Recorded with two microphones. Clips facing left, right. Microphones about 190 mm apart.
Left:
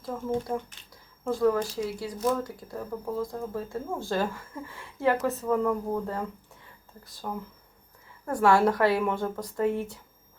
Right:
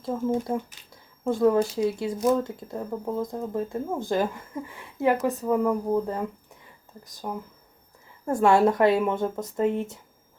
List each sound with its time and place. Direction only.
0.5 s speech: 20° right (ahead or behind)